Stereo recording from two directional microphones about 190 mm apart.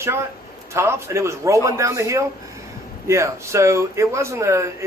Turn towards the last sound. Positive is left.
turn(degrees=-15)  # may be behind; listen again after turning